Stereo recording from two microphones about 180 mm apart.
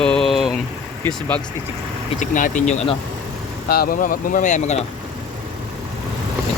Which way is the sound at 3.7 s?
55° left (ahead or behind).